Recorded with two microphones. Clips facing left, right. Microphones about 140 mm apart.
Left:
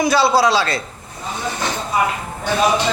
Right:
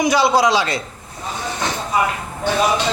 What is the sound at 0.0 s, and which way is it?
Speech, 15° right (ahead or behind).